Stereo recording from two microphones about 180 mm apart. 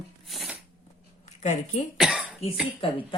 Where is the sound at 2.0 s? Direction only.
5° right (ahead or behind).